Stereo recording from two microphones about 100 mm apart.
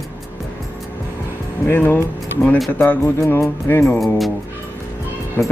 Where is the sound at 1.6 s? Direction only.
20° left (ahead or behind).